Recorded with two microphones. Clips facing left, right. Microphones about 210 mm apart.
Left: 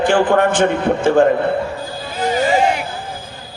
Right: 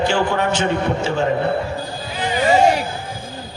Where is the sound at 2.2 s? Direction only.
45° left (ahead or behind).